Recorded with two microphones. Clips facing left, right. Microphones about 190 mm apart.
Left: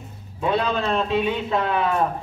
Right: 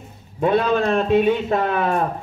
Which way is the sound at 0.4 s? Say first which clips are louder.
Right 5 dB; 50° right (ahead or behind).